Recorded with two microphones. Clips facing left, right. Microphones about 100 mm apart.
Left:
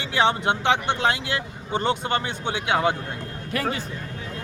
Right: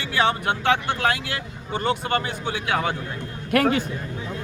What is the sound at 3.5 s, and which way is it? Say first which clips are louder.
Speech: right 7 dB; 60° right (ahead or behind).